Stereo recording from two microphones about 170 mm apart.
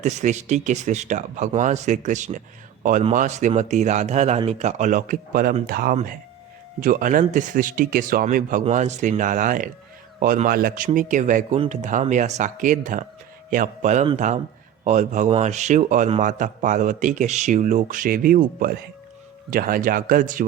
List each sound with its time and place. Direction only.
0.0 s speech: 45° right (ahead or behind)